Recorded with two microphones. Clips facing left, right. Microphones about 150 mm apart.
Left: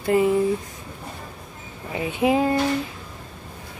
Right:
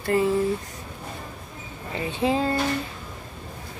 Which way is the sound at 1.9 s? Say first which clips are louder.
Left 3 dB; 15° left (ahead or behind).